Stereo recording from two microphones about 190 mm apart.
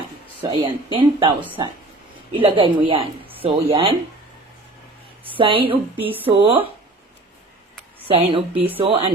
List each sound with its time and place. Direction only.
0.4 s speech: 25° right (ahead or behind)
2.3 s speech: 25° right (ahead or behind)
5.4 s speech: 30° right (ahead or behind)
5.7 s speech: 10° right (ahead or behind)
6.2 s speech: 25° right (ahead or behind)
8.0 s speech: 30° right (ahead or behind)